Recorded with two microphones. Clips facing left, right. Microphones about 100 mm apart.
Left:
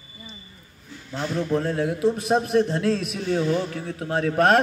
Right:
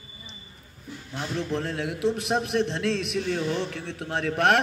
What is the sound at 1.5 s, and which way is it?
A man's voice, 5° left (ahead or behind).